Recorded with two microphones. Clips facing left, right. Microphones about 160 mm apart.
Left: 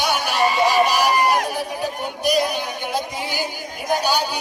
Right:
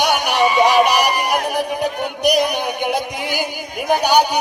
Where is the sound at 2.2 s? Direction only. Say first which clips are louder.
Right 3 dB; 70° right (ahead or behind).